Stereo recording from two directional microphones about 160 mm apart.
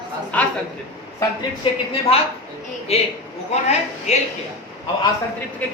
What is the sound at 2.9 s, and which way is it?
A man's voice, 40° left (ahead or behind).